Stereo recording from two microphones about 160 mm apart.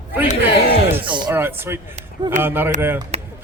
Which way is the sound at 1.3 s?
15° right (ahead or behind).